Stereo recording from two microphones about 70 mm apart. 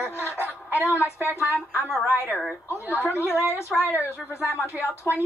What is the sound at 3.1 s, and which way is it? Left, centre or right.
Speech, left.